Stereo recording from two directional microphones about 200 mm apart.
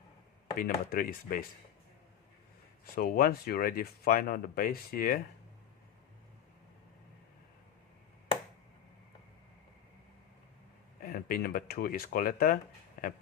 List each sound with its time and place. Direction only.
0.6 s speech: 45° left (ahead or behind)
2.8 s speech: 50° left (ahead or behind)
11.0 s speech: 45° left (ahead or behind)